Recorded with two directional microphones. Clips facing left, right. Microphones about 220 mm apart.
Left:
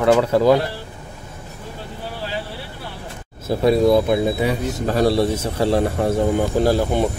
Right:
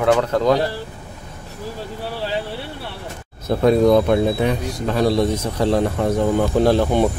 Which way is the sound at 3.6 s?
5° left (ahead or behind).